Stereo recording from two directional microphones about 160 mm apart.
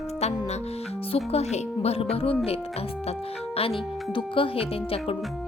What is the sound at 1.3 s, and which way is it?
Speech, 40° left (ahead or behind).